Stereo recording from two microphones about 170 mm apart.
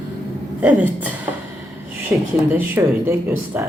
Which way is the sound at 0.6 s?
10° right (ahead or behind).